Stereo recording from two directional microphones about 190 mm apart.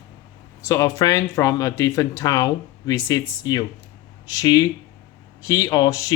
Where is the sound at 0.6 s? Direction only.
15° left (ahead or behind).